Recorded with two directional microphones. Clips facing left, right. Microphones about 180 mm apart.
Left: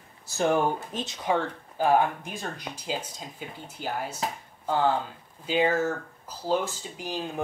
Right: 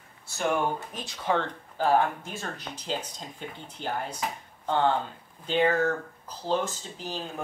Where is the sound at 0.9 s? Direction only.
20° left (ahead or behind).